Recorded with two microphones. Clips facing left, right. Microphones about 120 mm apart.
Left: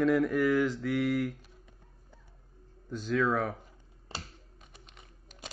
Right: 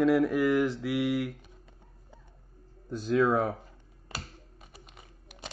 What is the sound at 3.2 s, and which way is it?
Speech, 25° right (ahead or behind).